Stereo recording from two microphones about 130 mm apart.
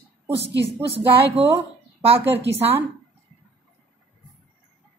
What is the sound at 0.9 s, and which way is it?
Speech, 50° right (ahead or behind).